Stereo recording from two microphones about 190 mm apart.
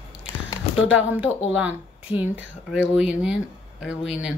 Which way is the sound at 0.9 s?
5° right (ahead or behind).